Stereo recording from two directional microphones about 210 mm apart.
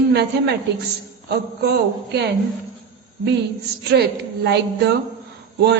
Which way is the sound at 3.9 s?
50° right (ahead or behind).